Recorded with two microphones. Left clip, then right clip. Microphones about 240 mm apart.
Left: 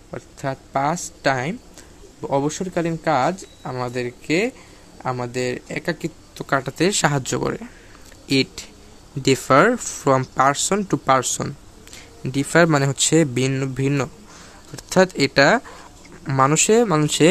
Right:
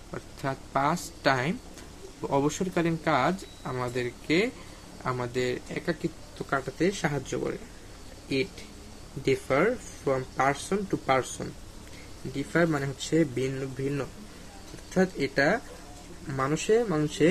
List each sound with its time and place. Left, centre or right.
0.1 s speech: centre; by 7.5 s left
9.2 s speech: left